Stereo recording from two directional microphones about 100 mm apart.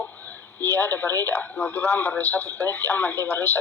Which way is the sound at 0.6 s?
20° left (ahead or behind).